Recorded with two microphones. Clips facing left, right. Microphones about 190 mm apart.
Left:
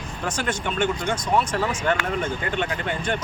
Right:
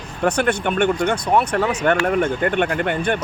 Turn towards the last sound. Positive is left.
turn(degrees=-60)  # may be behind; listen again after turning